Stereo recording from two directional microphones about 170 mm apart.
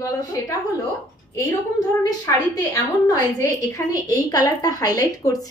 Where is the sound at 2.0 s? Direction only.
20° left (ahead or behind).